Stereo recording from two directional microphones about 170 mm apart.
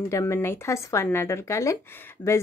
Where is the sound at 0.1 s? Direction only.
15° left (ahead or behind).